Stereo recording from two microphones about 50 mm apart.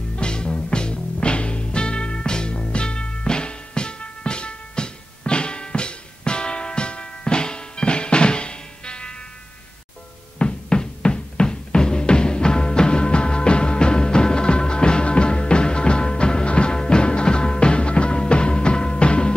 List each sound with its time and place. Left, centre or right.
0.1 s music: centre
10.4 s music: centre